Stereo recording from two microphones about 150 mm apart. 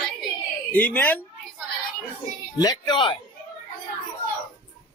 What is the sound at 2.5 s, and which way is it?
Speech, 25° left (ahead or behind).